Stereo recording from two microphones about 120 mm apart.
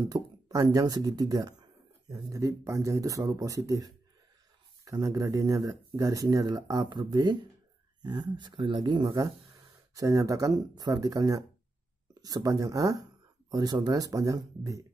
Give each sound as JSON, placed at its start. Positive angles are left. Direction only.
{"t": 0.1, "sound": "speech", "side_deg": -30}